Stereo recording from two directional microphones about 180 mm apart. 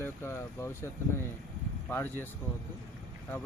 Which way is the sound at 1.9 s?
10° left (ahead or behind).